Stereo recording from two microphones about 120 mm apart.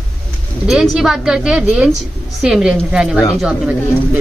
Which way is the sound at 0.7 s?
5° right (ahead or behind).